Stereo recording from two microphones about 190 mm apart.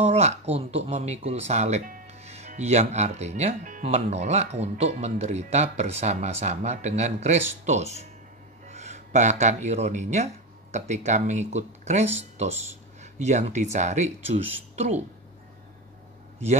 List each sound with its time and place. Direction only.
0.0 s speech: 35° right (ahead or behind)